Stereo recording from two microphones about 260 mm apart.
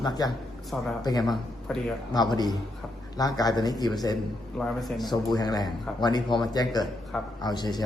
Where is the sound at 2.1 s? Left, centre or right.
Centre.